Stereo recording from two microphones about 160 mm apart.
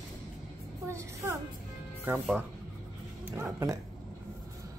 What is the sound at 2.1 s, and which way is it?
Speech, 10° right (ahead or behind).